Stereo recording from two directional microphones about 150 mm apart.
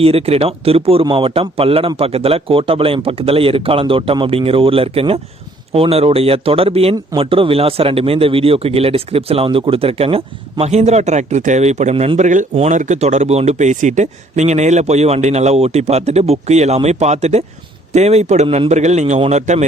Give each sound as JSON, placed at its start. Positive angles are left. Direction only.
{"t": 0.0, "sound": "a man's voice", "side_deg": -40}
{"t": 18.4, "sound": "a man's voice", "side_deg": -35}
{"t": 18.7, "sound": "speech", "side_deg": -50}